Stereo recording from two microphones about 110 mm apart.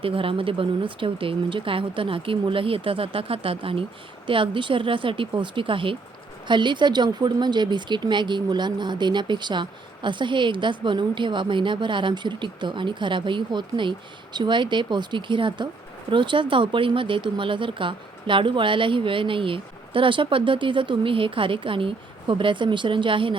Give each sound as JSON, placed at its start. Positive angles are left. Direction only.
{"t": 0.0, "sound": "speech", "side_deg": -55}